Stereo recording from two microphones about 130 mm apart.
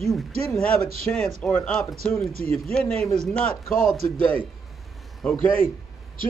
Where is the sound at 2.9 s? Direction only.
55° right (ahead or behind).